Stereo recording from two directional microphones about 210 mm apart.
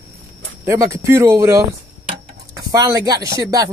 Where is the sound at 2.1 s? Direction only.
15° right (ahead or behind).